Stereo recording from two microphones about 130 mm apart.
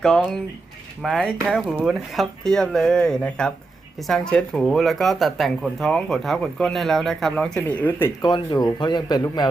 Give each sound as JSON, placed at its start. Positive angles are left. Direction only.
{"t": 1.0, "sound": "speech", "side_deg": 0}
{"t": 8.2, "sound": "speech", "side_deg": 30}